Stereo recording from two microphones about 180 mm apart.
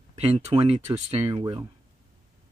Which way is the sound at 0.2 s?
35° right (ahead or behind).